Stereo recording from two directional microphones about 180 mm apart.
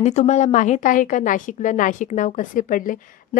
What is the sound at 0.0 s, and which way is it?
A woman's voice, 40° left (ahead or behind).